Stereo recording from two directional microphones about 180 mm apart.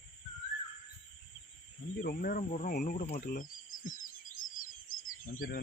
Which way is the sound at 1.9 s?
55° left (ahead or behind).